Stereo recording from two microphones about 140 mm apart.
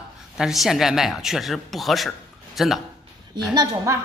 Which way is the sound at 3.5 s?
25° right (ahead or behind).